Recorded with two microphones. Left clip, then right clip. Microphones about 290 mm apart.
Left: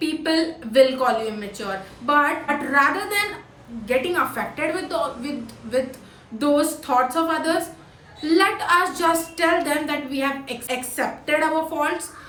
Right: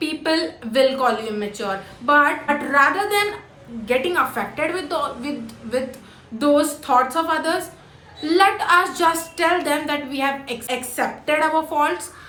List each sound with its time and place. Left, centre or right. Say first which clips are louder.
0.0 s a woman's voice: right 1 dB; centre
6.4 s a woman's voice: right 2 dB; centre